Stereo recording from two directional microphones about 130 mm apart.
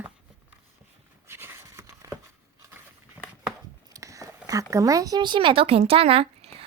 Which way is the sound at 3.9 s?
25° right (ahead or behind).